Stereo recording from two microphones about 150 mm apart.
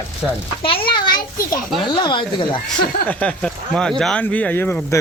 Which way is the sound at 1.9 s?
30° left (ahead or behind).